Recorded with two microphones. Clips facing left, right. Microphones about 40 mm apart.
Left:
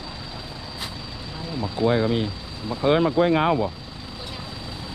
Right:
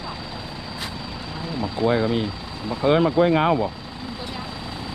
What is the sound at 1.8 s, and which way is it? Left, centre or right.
Speech, right.